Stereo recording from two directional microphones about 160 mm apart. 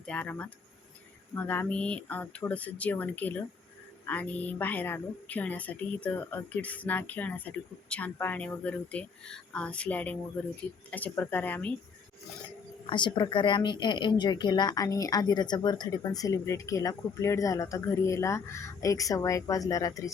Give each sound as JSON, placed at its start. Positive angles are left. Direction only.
{"t": 0.0, "sound": "a woman's voice", "side_deg": 10}
{"t": 12.9, "sound": "speech", "side_deg": 30}